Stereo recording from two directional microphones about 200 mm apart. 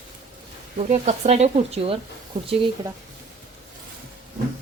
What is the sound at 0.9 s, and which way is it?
A woman's voice, 35° right (ahead or behind).